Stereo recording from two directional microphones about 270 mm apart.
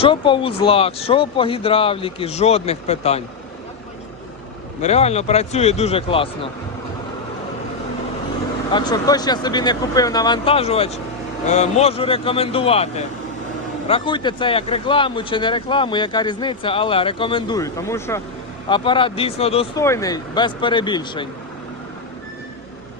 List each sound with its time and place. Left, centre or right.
0.0 s speech: centre
4.8 s speech: left
8.7 s speech: centre